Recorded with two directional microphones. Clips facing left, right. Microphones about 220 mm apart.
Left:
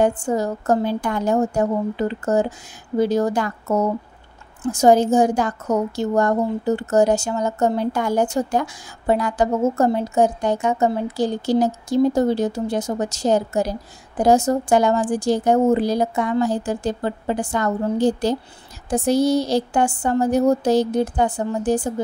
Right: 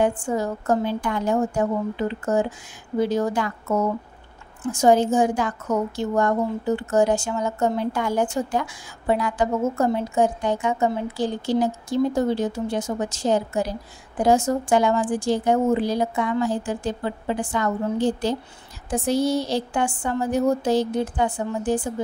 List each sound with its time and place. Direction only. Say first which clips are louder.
0.0 s a woman's voice: left 3 dB; 40° left (ahead or behind)